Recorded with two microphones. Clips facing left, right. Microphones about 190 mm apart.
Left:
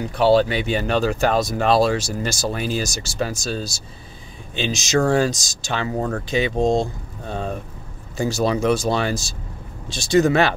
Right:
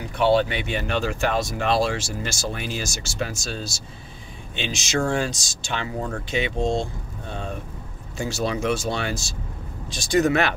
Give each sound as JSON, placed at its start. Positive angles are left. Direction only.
{"t": 0.1, "sound": "speech", "side_deg": 35}
{"t": 9.9, "sound": "speech", "side_deg": 25}